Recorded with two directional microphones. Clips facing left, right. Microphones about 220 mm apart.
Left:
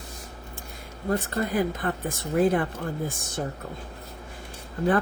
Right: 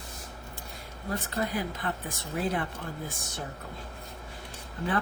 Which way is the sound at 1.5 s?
50° left (ahead or behind).